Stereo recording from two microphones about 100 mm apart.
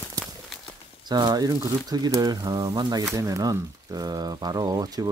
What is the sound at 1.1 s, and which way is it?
Speech, 45° right (ahead or behind).